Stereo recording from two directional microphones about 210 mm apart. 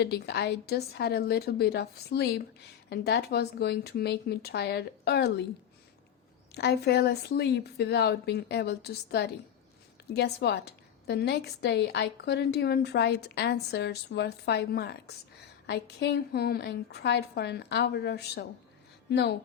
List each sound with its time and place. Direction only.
0.0 s a woman's voice: 50° left (ahead or behind)
6.5 s a woman's voice: 50° left (ahead or behind)